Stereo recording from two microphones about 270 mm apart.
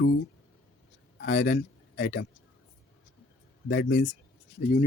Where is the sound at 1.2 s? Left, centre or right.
Left.